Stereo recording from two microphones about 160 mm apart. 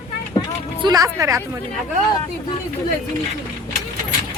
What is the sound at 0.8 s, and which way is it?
Speech, 25° right (ahead or behind).